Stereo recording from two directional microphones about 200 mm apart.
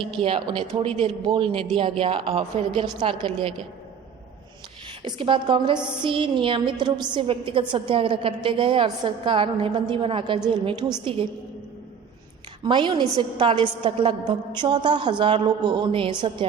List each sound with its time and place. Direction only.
0.2 s a woman's voice: 25° right (ahead or behind)
5.0 s a woman's voice: 25° right (ahead or behind)
12.6 s a woman's voice: 25° right (ahead or behind)